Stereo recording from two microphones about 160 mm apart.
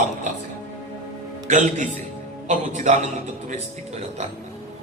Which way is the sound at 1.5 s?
50° right (ahead or behind).